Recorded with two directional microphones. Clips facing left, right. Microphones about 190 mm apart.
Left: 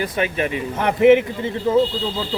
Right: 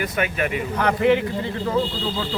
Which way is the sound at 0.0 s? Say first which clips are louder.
Left 2 dB; 30° left (ahead or behind).